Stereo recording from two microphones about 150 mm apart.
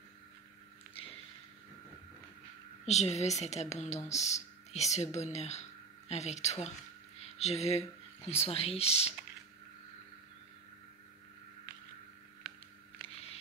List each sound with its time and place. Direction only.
2.9 s speech: 50° left (ahead or behind)